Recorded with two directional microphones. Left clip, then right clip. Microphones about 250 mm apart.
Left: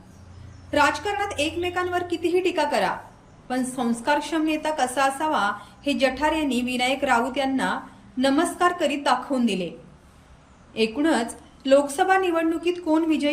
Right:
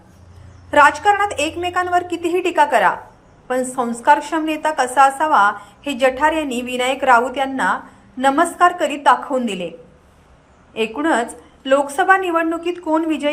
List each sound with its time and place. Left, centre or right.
0.7 s a woman's voice: centre
10.8 s a woman's voice: centre